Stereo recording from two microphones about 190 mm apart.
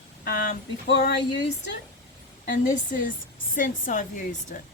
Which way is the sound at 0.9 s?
70° left (ahead or behind).